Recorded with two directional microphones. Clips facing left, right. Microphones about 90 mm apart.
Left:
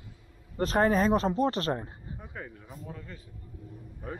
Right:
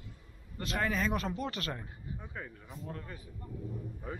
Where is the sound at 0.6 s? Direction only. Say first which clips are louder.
Left 9 dB; 40° left (ahead or behind).